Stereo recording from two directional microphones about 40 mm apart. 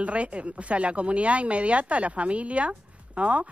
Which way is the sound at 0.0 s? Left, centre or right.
Right.